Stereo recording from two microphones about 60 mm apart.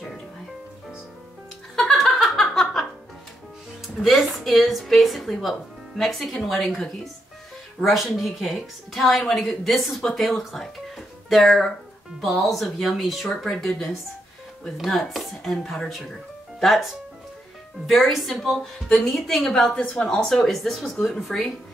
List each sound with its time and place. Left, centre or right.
1.8 s giggle: centre
3.8 s a woman's voice: centre
19.8 s speech: centre
20.4 s a woman's voice: centre